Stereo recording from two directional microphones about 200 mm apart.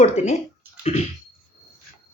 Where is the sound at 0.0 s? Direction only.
35° left (ahead or behind).